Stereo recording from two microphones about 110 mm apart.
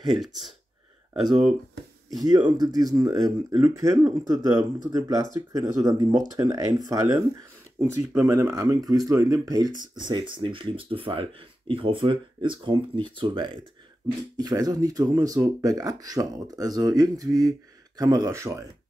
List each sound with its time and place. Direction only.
0.2 s speech: centre (ahead or behind)
2.2 s speech: 35° right (ahead or behind)
10.0 s speech: 45° right (ahead or behind)
14.3 s speech: 35° right (ahead or behind)